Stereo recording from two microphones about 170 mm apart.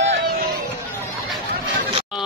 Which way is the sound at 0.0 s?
80° right.